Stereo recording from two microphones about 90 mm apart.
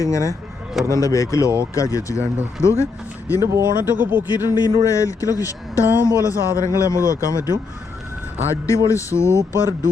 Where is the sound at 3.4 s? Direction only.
30° right (ahead or behind).